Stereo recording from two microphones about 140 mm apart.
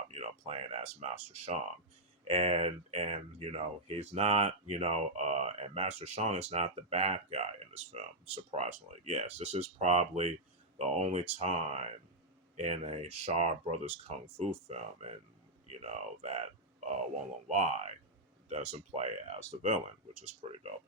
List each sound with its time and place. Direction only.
0.1 s speech: 45° right (ahead or behind)
17.5 s speech: 50° right (ahead or behind)